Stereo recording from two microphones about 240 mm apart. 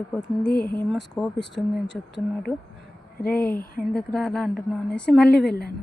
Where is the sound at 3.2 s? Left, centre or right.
Left.